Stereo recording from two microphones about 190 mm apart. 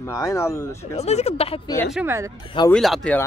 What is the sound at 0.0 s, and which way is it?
Speech, 15° left (ahead or behind).